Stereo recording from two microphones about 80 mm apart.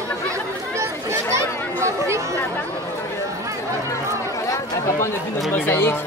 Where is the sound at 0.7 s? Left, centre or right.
Right.